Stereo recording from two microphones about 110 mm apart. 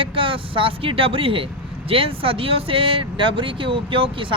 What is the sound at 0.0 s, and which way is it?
Speech, 55° right (ahead or behind).